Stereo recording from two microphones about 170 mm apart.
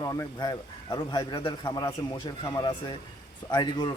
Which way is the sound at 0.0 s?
20° left (ahead or behind).